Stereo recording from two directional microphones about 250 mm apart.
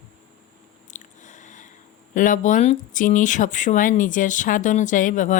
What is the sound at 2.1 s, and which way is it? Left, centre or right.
Speech, left.